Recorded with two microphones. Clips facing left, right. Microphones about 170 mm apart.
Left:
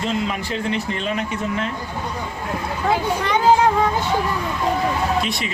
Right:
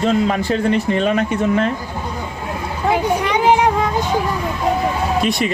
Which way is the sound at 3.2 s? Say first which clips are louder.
Right 1 dB; 15° right (ahead or behind).